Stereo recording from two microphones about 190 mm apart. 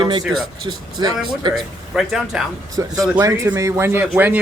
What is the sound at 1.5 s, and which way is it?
Speech, centre (ahead or behind).